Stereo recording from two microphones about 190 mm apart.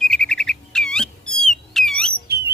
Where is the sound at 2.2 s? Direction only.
55° right (ahead or behind).